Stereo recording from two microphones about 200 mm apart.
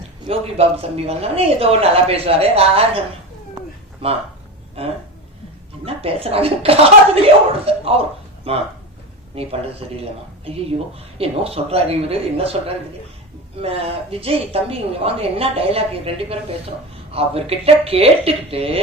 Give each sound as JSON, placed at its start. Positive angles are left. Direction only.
{"t": 0.3, "sound": "a woman's voice", "side_deg": -30}
{"t": 5.8, "sound": "a woman's voice", "side_deg": -30}
{"t": 10.9, "sound": "a woman's voice", "side_deg": -30}